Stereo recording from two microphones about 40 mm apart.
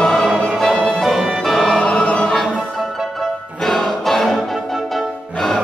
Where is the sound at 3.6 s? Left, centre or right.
Centre.